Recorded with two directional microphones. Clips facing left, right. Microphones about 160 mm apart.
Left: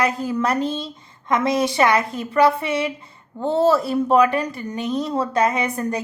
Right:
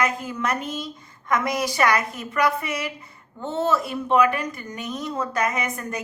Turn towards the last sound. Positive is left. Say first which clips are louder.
# left 5 dB
turn(degrees=30)  # may be behind; listen again after turning